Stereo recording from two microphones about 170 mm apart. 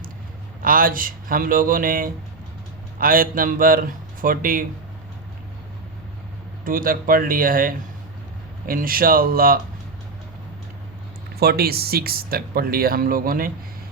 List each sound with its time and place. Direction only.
0.6 s speech: 55° right (ahead or behind)
6.7 s speech: 55° right (ahead or behind)
11.3 s speech: 65° right (ahead or behind)